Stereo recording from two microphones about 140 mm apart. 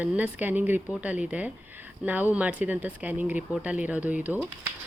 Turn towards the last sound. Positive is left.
turn(degrees=-10)  # may be behind; listen again after turning